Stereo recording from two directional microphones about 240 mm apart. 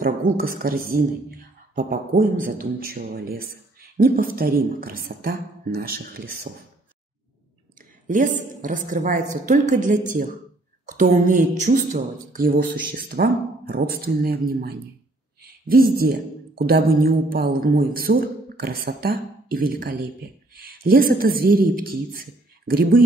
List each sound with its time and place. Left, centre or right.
0.0 s speech: right
8.1 s speech: right